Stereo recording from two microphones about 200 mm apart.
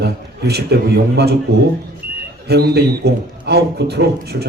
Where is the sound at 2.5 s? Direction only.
55° right (ahead or behind).